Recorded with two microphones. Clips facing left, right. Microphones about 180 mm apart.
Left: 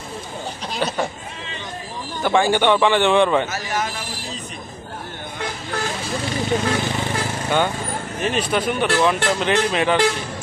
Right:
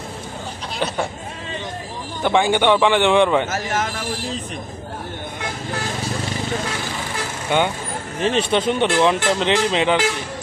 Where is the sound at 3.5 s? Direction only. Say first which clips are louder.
Right 2 dB; 50° right (ahead or behind).